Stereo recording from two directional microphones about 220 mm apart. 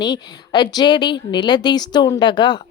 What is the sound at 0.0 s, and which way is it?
Speech, 20° left (ahead or behind).